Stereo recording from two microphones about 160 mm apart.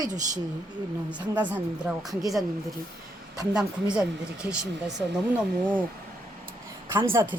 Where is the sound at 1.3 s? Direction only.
10° right (ahead or behind).